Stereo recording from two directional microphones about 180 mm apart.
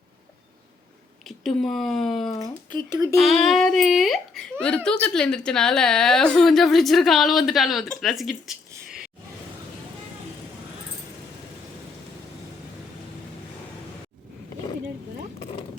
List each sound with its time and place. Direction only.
1.3 s a woman's voice: centre (ahead or behind)
2.6 s speech: 25° right (ahead or behind)
3.2 s a woman's voice: centre (ahead or behind)